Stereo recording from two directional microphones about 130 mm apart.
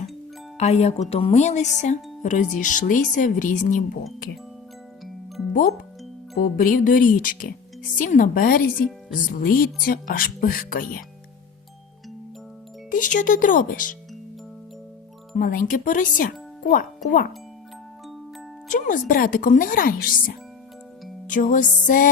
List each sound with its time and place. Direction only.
0.5 s speech: 60° left (ahead or behind); by 3.8 s 85° left
6.4 s speech: 90° left
12.9 s speech: 85° left
15.4 s speech: 90° left
18.7 s speech: 85° left
21.2 s music: 85° left